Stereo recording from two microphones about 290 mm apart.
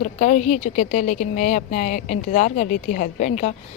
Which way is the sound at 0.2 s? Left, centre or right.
Left.